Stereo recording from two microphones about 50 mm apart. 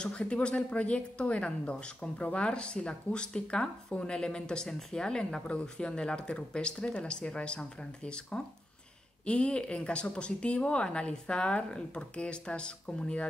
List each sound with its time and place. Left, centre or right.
0.0 s speech: centre